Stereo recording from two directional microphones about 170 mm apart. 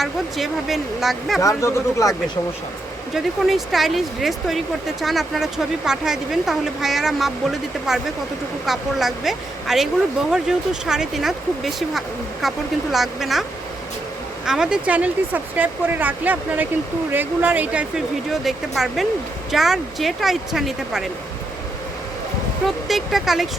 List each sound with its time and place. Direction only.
0.0 s speech: centre (ahead or behind)
1.4 s speech: 20° left (ahead or behind)
3.4 s speech: centre (ahead or behind)
14.4 s speech: 5° right (ahead or behind)
22.9 s speech: centre (ahead or behind)